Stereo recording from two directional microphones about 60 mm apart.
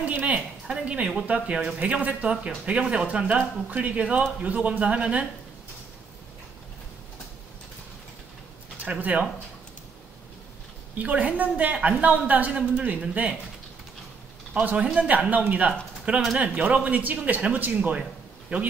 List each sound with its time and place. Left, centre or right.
0.0 s speech: right
8.8 s speech: right
11.0 s speech: right
14.5 s speech: right